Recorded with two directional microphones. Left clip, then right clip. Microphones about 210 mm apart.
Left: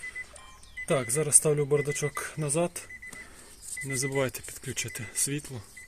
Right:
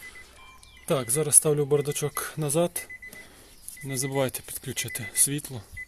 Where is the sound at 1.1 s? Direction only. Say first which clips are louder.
Right 3 dB; 15° right (ahead or behind).